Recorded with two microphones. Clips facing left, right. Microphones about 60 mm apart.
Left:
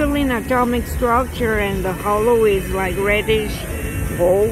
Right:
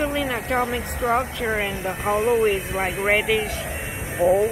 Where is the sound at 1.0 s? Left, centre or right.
Centre.